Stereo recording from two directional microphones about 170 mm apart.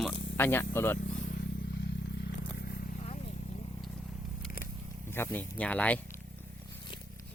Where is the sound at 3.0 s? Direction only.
40° left (ahead or behind).